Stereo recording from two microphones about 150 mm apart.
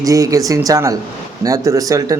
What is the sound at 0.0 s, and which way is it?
Speech, 20° right (ahead or behind).